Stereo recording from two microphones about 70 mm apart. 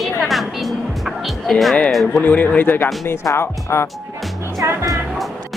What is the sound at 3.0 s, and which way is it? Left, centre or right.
Speech, left.